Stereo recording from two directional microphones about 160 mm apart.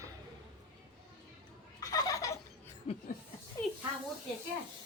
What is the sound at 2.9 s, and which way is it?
Chuckle, 40° left (ahead or behind).